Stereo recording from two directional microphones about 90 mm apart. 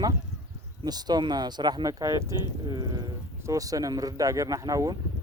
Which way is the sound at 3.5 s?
40° right (ahead or behind).